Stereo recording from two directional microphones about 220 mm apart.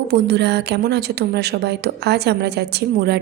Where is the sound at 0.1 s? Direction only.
50° right (ahead or behind).